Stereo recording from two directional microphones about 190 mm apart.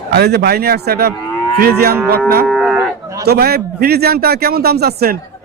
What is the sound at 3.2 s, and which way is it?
A man's voice, 55° right (ahead or behind).